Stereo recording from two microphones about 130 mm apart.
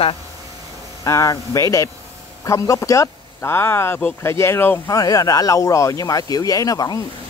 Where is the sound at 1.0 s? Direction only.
25° left (ahead or behind).